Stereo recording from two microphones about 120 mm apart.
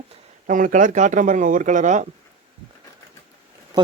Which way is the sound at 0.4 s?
90° right.